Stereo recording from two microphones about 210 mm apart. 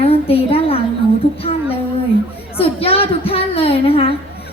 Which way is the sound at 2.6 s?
25° left (ahead or behind).